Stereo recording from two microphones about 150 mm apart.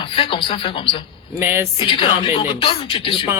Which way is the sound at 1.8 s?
35° left (ahead or behind).